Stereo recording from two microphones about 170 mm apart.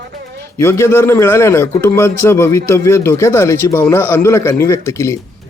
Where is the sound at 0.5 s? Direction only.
15° left (ahead or behind).